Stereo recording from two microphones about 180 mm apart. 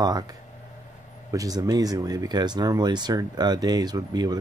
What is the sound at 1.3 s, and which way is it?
Speech, 20° right (ahead or behind).